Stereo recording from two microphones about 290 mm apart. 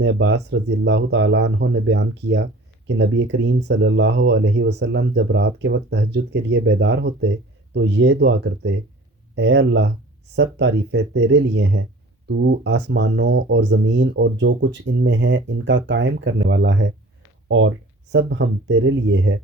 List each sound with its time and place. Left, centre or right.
0.0 s speech: right
18.1 s speech: right